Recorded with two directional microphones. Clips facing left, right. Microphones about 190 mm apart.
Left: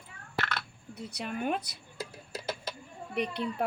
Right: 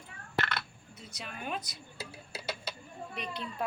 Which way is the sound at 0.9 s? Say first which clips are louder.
Left 9 dB; 60° left (ahead or behind).